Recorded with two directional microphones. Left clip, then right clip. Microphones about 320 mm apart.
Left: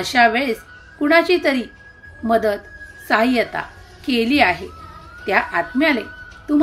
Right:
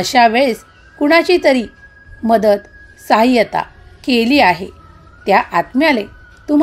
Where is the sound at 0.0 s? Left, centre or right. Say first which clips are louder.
Right 5 dB; right.